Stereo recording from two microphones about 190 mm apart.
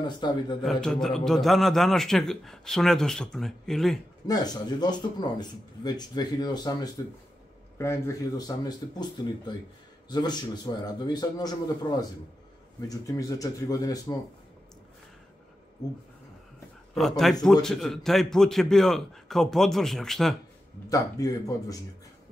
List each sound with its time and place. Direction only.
0.0 s speech: 25° left (ahead or behind)
0.7 s a man's voice: 5° left (ahead or behind)
4.3 s speech: 20° left (ahead or behind)
17.2 s a man's voice: centre (ahead or behind)
20.9 s speech: 20° left (ahead or behind)